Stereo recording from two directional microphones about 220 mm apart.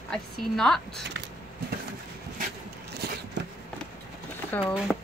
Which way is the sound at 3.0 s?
45° right (ahead or behind).